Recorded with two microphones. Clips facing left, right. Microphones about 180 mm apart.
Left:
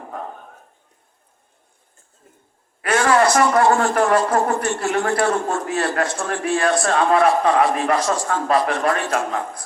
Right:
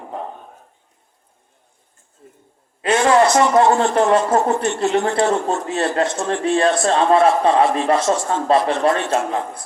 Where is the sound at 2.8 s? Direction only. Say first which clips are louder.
Right 2 dB; 20° right (ahead or behind).